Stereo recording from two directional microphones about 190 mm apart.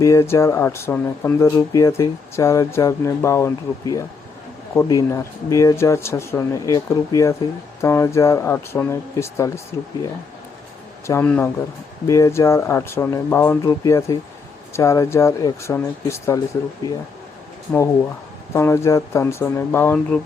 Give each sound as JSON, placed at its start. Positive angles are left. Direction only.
{"t": 0.0, "sound": "speech", "side_deg": 15}
{"t": 11.0, "sound": "speech", "side_deg": 10}
{"t": 18.5, "sound": "speech", "side_deg": 15}